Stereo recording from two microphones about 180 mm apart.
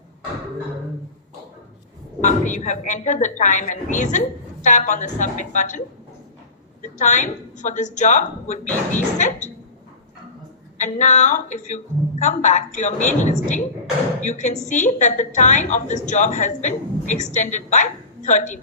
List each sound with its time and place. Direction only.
2.2 s a woman's voice: 45° left (ahead or behind)
6.8 s a woman's voice: 45° left (ahead or behind)
10.8 s a woman's voice: 40° left (ahead or behind)